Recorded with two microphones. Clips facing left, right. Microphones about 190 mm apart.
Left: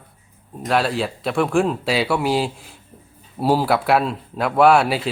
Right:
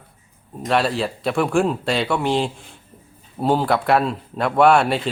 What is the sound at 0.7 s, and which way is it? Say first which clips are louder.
Speech: even; centre (ahead or behind).